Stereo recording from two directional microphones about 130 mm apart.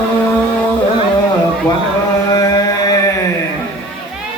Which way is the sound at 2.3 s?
30° left (ahead or behind).